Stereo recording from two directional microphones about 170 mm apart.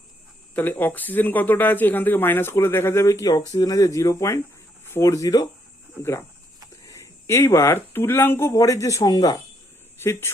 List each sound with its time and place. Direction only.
0.5 s speech: 10° left (ahead or behind)